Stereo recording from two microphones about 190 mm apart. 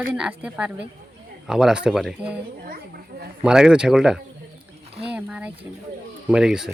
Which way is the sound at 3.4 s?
5° right (ahead or behind).